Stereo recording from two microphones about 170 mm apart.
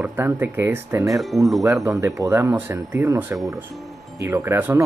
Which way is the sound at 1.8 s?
20° right (ahead or behind).